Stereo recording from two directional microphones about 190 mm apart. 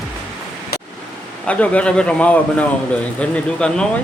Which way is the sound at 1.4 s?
5° left (ahead or behind).